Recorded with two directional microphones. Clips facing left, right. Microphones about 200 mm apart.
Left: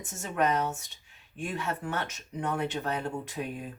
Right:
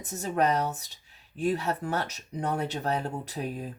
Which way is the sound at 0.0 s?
35° right (ahead or behind).